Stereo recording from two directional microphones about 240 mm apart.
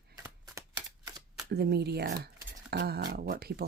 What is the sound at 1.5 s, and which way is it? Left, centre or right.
Speech, right.